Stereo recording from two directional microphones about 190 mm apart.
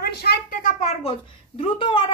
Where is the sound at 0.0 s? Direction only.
55° left (ahead or behind); by 1.1 s 40° left (ahead or behind).